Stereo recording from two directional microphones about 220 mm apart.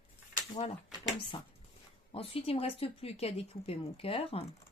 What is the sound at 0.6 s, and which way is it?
Speech, 25° left (ahead or behind).